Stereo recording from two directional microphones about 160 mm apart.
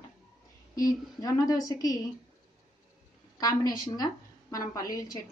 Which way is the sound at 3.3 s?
25° left (ahead or behind).